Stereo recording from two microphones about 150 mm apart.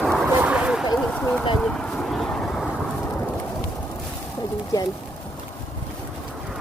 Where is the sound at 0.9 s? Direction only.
5° left (ahead or behind).